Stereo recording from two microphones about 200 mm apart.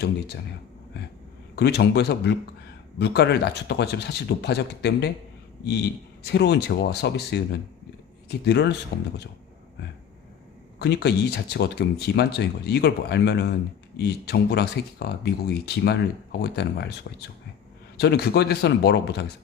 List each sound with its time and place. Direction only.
1.5 s speech: 55° left (ahead or behind)
6.2 s speech: 55° left (ahead or behind)
10.8 s a man's voice: 55° left (ahead or behind)